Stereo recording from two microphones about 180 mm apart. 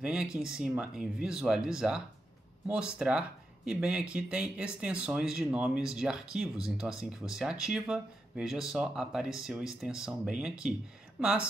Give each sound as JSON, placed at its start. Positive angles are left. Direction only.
{"t": 0.0, "sound": "speech", "side_deg": -5}